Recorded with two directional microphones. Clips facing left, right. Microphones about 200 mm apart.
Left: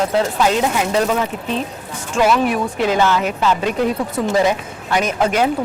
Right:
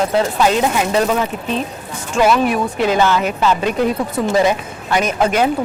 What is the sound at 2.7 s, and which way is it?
Speech, 10° right (ahead or behind).